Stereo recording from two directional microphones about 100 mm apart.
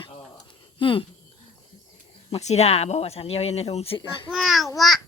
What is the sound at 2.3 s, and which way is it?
Speech, 90° left.